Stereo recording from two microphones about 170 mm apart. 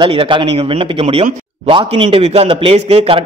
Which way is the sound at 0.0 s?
30° right (ahead or behind).